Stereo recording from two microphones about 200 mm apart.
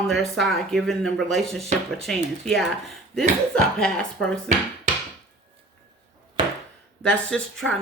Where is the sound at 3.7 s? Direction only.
5° left (ahead or behind).